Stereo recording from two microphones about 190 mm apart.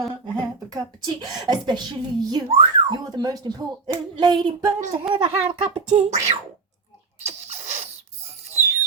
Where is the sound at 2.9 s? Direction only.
20° right (ahead or behind).